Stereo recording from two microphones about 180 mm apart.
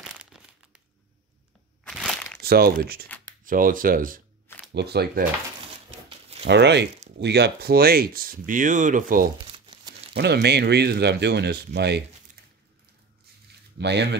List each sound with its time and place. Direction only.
0.1 s crumpling: 5° right (ahead or behind)
1.9 s crunch: centre (ahead or behind)
2.4 s speech: 60° right (ahead or behind)
4.7 s speech: 65° right (ahead or behind)
6.0 s a sound: 35° right (ahead or behind)
6.4 s speech: 70° right (ahead or behind); by 9.3 s 50° right (ahead or behind)
9.5 s crumpling: 30° right (ahead or behind)
10.1 s speech: 65° right (ahead or behind)
13.7 s speech: 70° right (ahead or behind)